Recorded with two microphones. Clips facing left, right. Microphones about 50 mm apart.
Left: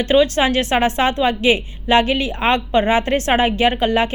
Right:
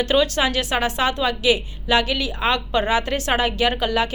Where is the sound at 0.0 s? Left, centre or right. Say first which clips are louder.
Left 4 dB; left.